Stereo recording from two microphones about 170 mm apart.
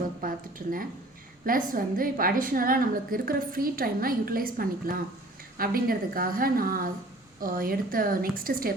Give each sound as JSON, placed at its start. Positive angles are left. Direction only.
{"t": 0.2, "sound": "a woman's voice", "side_deg": -55}